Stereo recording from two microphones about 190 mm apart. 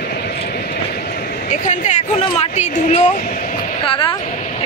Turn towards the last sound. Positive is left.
turn(degrees=30)  # may be behind; listen again after turning